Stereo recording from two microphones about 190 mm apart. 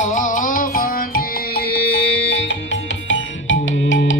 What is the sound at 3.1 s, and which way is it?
Music, 85° left.